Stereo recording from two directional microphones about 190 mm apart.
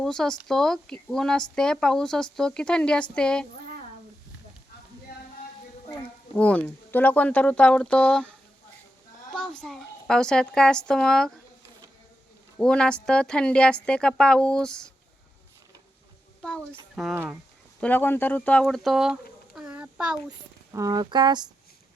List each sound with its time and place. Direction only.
0.0 s a woman's voice: 5° left (ahead or behind)
6.3 s a child's voice: 5° left (ahead or behind)
12.5 s a woman's voice: 5° left (ahead or behind)
16.7 s a woman's voice: 5° right (ahead or behind)
17.7 s speech: 10° left (ahead or behind)
18.6 s a sound: centre (ahead or behind)
20.7 s a sound: 20° right (ahead or behind)